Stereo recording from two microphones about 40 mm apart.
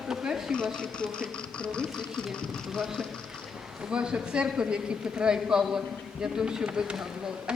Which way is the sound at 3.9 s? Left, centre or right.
Right.